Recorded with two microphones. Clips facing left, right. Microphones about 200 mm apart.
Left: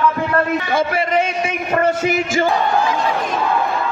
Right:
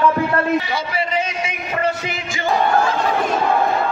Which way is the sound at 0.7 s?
55° left (ahead or behind).